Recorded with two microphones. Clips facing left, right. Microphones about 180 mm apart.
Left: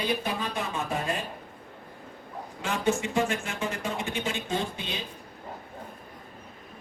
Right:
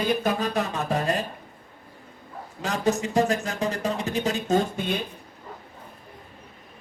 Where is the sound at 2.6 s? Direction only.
40° right (ahead or behind).